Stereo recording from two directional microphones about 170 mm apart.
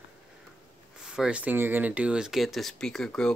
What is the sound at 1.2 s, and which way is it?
Speech, 5° right (ahead or behind).